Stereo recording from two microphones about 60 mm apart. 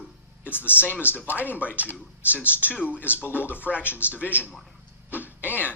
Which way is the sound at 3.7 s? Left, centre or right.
Left.